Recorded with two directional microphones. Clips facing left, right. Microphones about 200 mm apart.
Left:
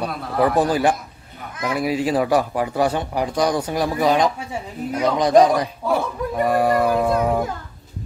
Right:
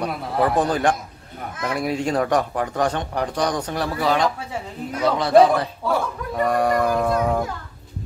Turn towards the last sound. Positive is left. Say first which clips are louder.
# left 2 dB
turn(degrees=5)  # may be behind; listen again after turning